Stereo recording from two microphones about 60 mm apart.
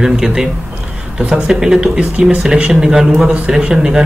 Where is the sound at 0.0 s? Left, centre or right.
Centre.